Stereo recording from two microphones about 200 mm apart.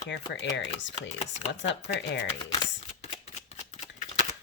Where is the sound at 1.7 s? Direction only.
60° left (ahead or behind).